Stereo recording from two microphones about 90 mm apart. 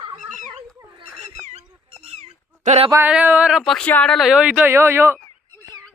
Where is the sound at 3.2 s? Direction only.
20° right (ahead or behind).